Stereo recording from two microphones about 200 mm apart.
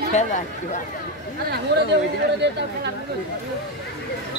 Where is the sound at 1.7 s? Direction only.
60° right (ahead or behind).